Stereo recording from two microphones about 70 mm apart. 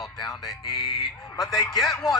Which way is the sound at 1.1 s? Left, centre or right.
Left.